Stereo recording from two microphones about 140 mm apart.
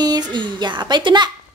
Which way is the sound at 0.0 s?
30° right (ahead or behind).